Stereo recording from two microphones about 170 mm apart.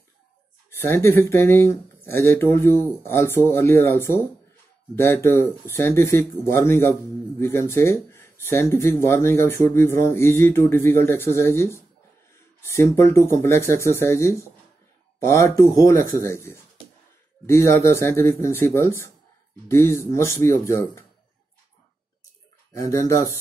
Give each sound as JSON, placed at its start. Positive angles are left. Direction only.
{"t": 0.7, "sound": "speech", "side_deg": 15}
{"t": 22.7, "sound": "speech", "side_deg": 20}